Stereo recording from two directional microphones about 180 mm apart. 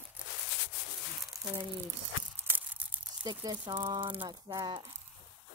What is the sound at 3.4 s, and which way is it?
Speech, 25° right (ahead or behind).